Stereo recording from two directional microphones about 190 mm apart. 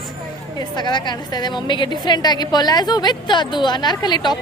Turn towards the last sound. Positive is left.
turn(degrees=20)  # may be behind; listen again after turning